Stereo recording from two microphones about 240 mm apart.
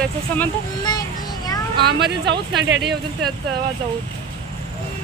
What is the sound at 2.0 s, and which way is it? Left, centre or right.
Speech, right.